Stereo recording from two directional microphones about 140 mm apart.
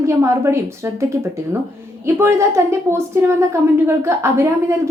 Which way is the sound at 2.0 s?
20° right (ahead or behind).